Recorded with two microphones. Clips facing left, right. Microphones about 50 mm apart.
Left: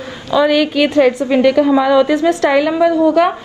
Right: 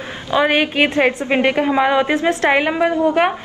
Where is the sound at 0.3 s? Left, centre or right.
Right.